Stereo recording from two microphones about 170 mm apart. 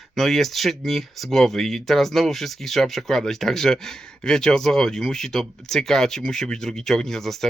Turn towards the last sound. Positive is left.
turn(degrees=0)  # may be behind; listen again after turning